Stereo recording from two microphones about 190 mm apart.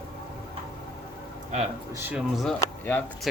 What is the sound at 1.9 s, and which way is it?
Speech, 10° right (ahead or behind).